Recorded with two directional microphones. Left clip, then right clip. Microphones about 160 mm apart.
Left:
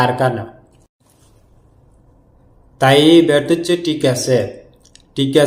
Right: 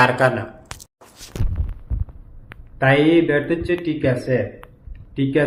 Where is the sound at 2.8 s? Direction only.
25° left (ahead or behind).